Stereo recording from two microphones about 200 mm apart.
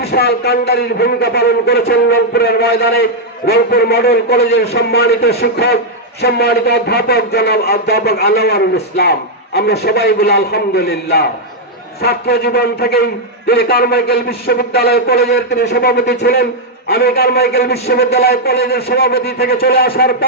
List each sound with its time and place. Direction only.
0.1 s a man's voice: 50° left (ahead or behind)